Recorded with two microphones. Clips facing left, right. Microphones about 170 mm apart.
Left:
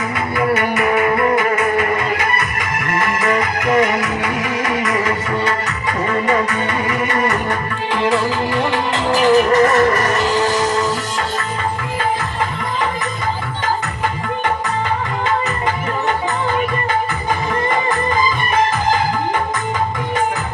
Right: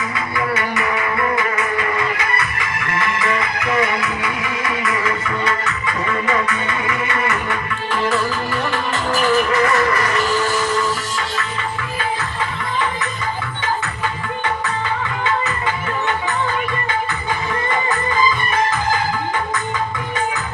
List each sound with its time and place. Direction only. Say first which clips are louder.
0.3 s music: left 5 dB; 50° left (ahead or behind)
8.0 s music: left 4 dB; 20° left (ahead or behind)
9.2 s music: left 5 dB; 40° left (ahead or behind)
17.5 s music: left 3 dB; 35° left (ahead or behind)